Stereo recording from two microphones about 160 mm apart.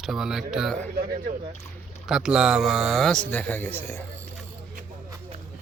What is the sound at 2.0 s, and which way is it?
Speech, 5° right (ahead or behind).